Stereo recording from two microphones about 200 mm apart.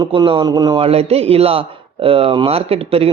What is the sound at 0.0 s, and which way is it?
A man's voice, 25° right (ahead or behind).